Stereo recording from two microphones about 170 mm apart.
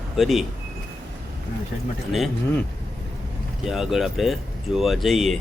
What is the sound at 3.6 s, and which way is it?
Speech, centre (ahead or behind).